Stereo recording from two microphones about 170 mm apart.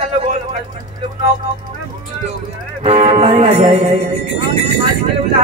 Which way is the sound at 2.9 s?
40° right (ahead or behind).